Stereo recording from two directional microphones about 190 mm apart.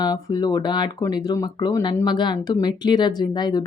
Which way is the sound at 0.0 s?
20° left (ahead or behind).